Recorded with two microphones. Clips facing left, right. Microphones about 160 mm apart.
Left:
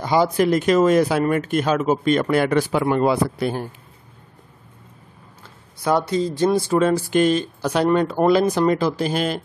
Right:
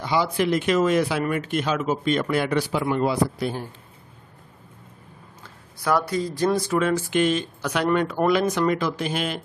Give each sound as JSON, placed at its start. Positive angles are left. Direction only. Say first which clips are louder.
{"t": 0.0, "sound": "speech", "louder": "left 5 dB", "side_deg": 45}
{"t": 5.9, "sound": "speech", "louder": "left 3 dB", "side_deg": 25}